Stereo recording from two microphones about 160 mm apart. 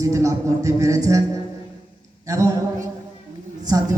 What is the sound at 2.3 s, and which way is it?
Speech, 20° right (ahead or behind).